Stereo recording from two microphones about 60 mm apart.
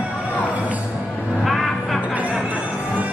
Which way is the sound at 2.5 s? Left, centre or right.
Right.